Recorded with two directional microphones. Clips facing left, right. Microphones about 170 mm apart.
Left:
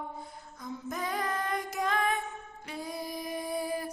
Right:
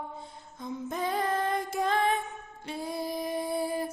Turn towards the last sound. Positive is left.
turn(degrees=-25)  # may be behind; listen again after turning